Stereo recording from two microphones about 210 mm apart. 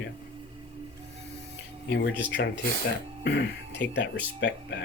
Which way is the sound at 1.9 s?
55° left (ahead or behind).